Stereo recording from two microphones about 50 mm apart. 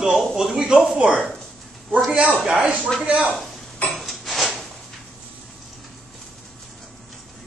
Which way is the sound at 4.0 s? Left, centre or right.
Centre.